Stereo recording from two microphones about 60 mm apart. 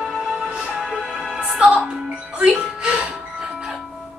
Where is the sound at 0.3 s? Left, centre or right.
Centre.